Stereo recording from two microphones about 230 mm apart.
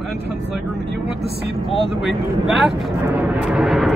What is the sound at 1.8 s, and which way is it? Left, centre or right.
Speech, centre.